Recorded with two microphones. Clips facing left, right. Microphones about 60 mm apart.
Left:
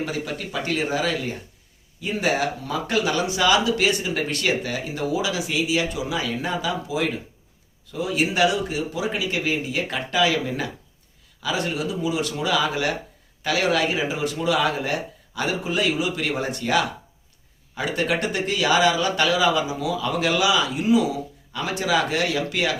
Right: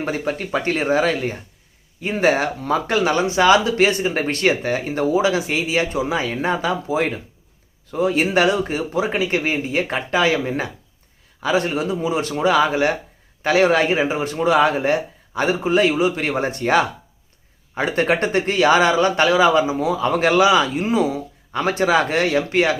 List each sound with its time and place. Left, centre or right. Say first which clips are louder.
0.0 s speech: right 5 dB; right